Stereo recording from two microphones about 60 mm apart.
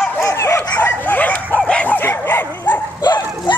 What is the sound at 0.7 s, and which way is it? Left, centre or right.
Bow-wow, left.